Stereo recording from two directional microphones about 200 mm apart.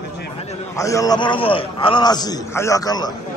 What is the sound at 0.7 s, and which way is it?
A man's voice, 15° left (ahead or behind).